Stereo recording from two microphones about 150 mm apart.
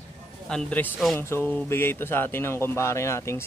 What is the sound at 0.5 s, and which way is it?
Speech, 5° left (ahead or behind).